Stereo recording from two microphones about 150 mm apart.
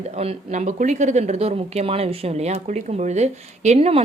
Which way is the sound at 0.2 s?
50° right (ahead or behind).